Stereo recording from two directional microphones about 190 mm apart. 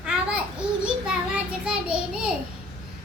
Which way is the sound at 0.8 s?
5° right (ahead or behind).